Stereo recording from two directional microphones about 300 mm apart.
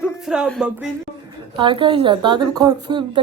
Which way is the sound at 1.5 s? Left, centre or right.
Centre.